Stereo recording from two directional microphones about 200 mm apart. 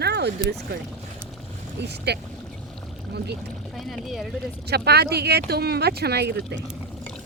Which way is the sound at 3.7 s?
Centre (ahead or behind).